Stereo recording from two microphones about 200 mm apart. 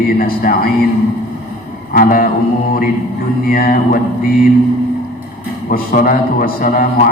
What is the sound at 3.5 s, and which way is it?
Speech, 45° left (ahead or behind).